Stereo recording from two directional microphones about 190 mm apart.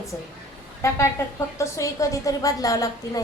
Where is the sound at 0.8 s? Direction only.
15° left (ahead or behind).